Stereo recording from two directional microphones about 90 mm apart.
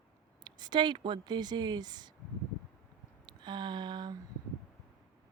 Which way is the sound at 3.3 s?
55° right (ahead or behind).